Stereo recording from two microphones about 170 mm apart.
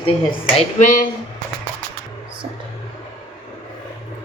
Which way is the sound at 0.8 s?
50° left (ahead or behind).